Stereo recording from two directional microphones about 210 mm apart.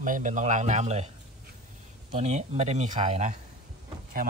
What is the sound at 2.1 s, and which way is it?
A man's voice, 35° right (ahead or behind).